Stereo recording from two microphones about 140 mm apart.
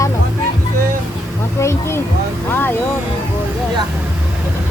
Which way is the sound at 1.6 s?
20° left (ahead or behind).